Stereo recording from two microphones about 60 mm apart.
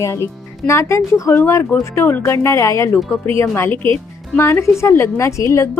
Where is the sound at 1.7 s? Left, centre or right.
Left.